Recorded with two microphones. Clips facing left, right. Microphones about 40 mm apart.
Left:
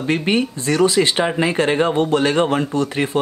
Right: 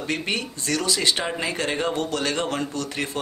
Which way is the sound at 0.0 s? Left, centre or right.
Left.